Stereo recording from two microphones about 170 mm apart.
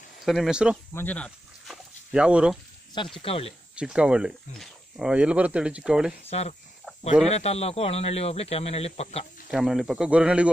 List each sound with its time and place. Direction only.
0.2 s speech: centre (ahead or behind)
0.9 s a sound: 10° left (ahead or behind)
2.1 s speech: 5° right (ahead or behind)
2.9 s speech: 30° left (ahead or behind)
3.7 s speech: 5° right (ahead or behind)
7.2 s speech: 40° left (ahead or behind)
9.5 s speech: 5° right (ahead or behind)